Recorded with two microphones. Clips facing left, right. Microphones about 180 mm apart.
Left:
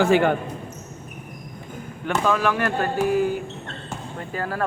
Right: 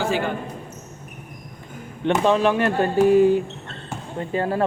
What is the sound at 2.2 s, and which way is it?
Speech, 25° right (ahead or behind).